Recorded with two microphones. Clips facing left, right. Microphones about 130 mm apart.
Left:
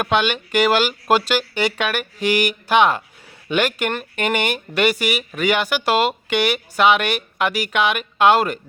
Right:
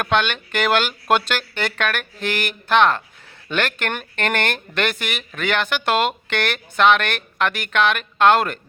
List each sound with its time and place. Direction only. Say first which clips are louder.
0.0 s speech: left 1 dB; 5° left (ahead or behind)